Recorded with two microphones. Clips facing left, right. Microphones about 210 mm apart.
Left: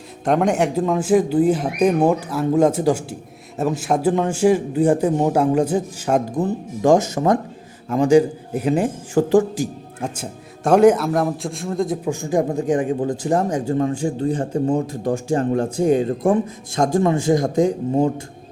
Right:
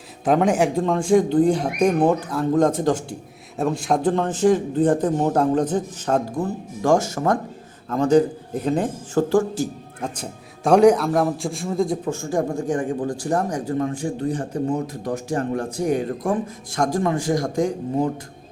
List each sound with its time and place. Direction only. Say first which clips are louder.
0.3 s a man's voice: even; centre (ahead or behind)
12.0 s speech: left 3 dB; 15° left (ahead or behind)